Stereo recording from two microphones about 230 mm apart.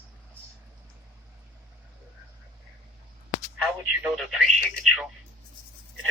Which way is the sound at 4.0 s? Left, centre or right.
Centre.